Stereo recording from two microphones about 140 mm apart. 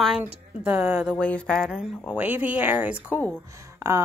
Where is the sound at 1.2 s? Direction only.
10° left (ahead or behind).